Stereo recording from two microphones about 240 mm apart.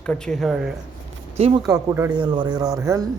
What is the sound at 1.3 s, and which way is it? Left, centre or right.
Speech, right.